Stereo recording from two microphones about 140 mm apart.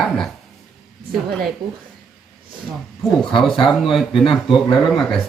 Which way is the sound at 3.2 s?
Centre (ahead or behind).